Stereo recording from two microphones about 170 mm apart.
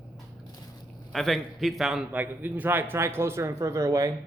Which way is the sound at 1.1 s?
Centre (ahead or behind).